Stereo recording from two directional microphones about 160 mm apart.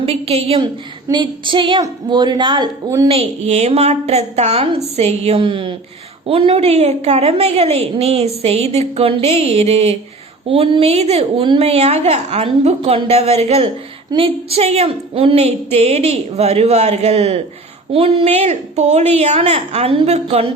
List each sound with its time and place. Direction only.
0.0 s a woman's voice: 40° right (ahead or behind)
3.1 s a woman's voice: 40° right (ahead or behind)